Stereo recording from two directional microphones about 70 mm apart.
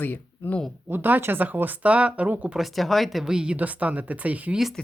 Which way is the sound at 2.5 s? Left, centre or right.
Centre.